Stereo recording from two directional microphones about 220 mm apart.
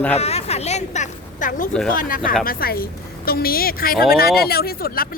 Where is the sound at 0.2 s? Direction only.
30° left (ahead or behind).